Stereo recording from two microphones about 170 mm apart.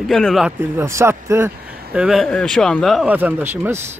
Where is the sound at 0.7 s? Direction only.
15° right (ahead or behind).